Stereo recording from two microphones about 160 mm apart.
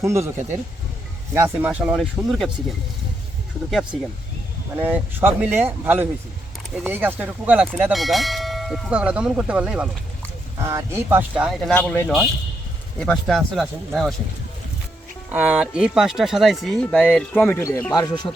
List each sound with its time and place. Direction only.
0.0 s speech: 15° right (ahead or behind)
4.8 s speech: 10° right (ahead or behind)
11.7 s speech: 10° left (ahead or behind)
15.3 s speech: 10° right (ahead or behind); by 17.8 s 15° left (ahead or behind)
17.9 s speech: 25° left (ahead or behind)